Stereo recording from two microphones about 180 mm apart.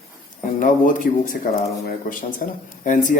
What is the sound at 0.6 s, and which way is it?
Speech, 45° left (ahead or behind).